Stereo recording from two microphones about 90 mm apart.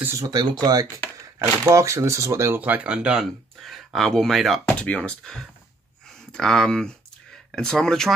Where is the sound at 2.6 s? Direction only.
15° right (ahead or behind).